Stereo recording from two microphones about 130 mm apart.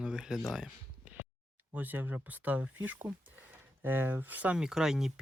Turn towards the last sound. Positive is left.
turn(degrees=-5)  # may be behind; listen again after turning